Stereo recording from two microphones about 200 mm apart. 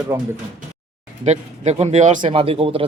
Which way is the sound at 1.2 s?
35° right (ahead or behind).